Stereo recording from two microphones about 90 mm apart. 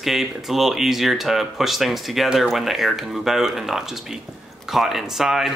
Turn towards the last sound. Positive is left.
turn(degrees=-5)  # may be behind; listen again after turning